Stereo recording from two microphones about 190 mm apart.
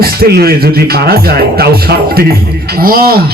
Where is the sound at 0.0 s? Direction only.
55° right (ahead or behind).